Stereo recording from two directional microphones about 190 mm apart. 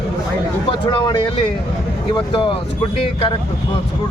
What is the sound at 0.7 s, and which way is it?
Speech, 25° left (ahead or behind).